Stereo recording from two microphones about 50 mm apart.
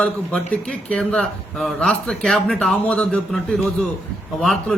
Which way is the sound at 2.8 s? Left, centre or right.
Left.